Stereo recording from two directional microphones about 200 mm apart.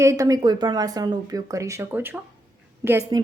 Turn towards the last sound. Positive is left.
turn(degrees=-15)  # may be behind; listen again after turning